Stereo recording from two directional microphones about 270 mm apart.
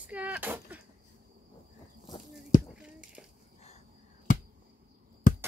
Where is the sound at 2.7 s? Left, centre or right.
Centre.